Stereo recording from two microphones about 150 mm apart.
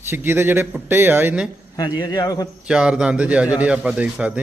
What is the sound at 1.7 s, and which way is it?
Speech, 25° left (ahead or behind).